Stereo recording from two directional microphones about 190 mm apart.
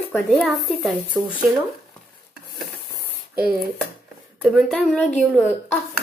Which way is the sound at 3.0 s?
50° right (ahead or behind).